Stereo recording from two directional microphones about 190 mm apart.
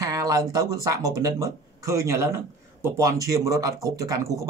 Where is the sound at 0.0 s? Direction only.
20° right (ahead or behind).